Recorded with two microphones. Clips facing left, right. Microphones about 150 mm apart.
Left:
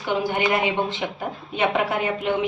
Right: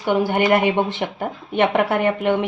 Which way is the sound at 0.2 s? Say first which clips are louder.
Right 5 dB; 55° right (ahead or behind).